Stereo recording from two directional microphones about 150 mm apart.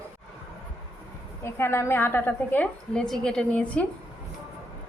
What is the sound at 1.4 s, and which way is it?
A woman's voice, 15° left (ahead or behind).